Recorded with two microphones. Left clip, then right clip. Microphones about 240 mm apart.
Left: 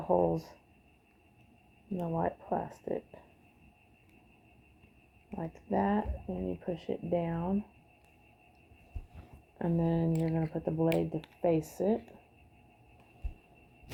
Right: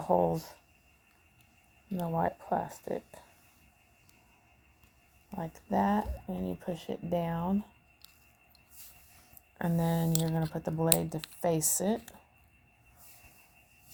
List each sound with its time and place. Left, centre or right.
0.0 s speech: right
2.0 s speech: right
5.3 s speech: right
9.6 s speech: right